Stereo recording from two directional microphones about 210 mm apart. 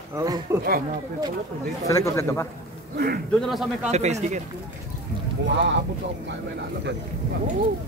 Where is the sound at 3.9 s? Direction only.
30° right (ahead or behind).